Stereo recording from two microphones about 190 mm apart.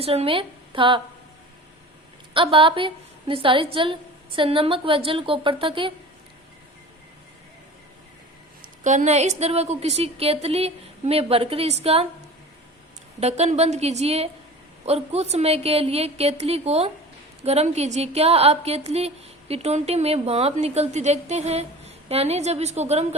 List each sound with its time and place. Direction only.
0.0 s a woman's voice: 30° right (ahead or behind)
2.3 s a woman's voice: 25° right (ahead or behind)
8.8 s speech: 40° right (ahead or behind)
13.1 s speech: 35° right (ahead or behind)